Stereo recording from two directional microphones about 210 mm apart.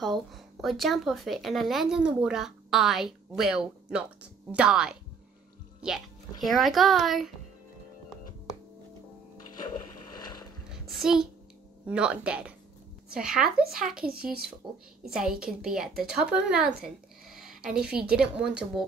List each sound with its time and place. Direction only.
0.0 s speech: centre (ahead or behind)
6.4 s speech: centre (ahead or behind)
10.7 s a sound: centre (ahead or behind)
11.8 s speech: 5° right (ahead or behind)
14.6 s a woman's voice: 20° right (ahead or behind)
15.0 s speech: 5° right (ahead or behind)